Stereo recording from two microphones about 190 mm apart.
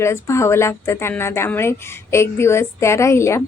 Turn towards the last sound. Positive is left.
turn(degrees=15)  # may be behind; listen again after turning